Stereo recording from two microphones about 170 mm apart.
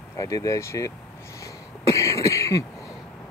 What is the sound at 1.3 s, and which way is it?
Cough, 20° left (ahead or behind).